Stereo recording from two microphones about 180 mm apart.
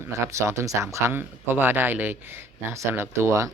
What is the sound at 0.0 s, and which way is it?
Speech, 15° right (ahead or behind).